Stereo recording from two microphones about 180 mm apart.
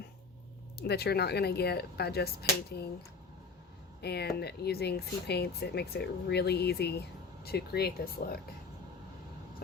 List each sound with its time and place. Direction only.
0.8 s speech: 60° left (ahead or behind)
4.0 s speech: 65° left (ahead or behind)